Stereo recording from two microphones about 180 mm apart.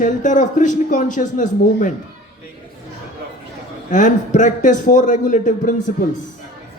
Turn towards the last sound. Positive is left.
turn(degrees=45)  # may be behind; listen again after turning